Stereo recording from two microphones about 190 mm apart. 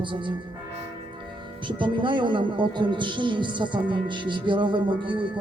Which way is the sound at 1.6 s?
25° right (ahead or behind).